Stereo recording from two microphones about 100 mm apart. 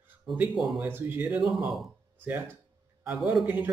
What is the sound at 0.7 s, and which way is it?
A man's voice, 20° right (ahead or behind).